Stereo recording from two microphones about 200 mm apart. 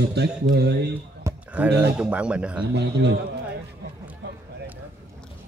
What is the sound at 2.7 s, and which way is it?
Speech, 55° right (ahead or behind).